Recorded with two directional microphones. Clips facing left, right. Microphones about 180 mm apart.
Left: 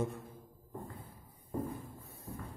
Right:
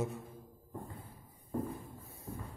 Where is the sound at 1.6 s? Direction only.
Centre (ahead or behind).